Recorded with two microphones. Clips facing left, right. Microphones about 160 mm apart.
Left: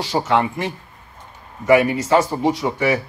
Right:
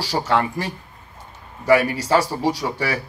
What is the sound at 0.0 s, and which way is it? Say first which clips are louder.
Speech: left 2 dB; 35° right (ahead or behind).